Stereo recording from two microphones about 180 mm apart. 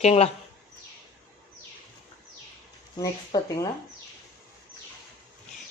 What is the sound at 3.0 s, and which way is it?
Speech, 20° left (ahead or behind).